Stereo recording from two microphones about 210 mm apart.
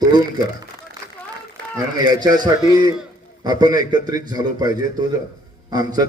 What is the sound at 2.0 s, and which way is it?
Speech, 20° right (ahead or behind).